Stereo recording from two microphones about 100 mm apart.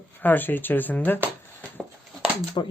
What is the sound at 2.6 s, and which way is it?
Speech, 50° left (ahead or behind).